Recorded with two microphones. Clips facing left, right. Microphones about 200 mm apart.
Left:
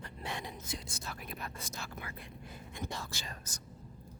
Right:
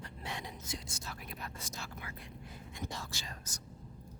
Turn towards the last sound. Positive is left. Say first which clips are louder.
# left 1 dB
turn(degrees=55)  # may be behind; listen again after turning